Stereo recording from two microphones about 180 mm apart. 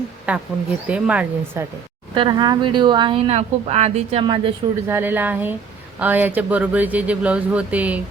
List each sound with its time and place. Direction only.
0.3 s speech: 5° right (ahead or behind)
2.1 s speech: 25° right (ahead or behind)
4.9 s speech: 10° right (ahead or behind)